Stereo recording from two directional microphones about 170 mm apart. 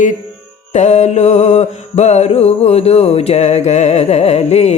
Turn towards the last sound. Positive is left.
turn(degrees=40)  # may be behind; listen again after turning